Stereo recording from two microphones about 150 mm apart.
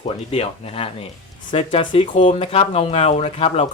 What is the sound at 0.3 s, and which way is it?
Speech, 40° left (ahead or behind).